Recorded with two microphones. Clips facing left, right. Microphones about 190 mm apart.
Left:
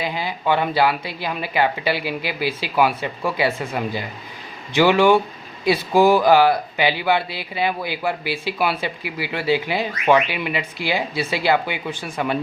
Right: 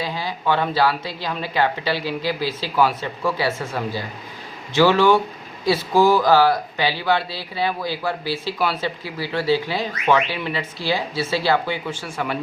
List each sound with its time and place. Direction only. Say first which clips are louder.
0.0 s speech: left 1 dB; 15° left (ahead or behind)